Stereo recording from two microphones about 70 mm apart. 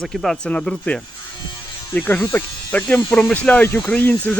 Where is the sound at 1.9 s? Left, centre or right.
Left.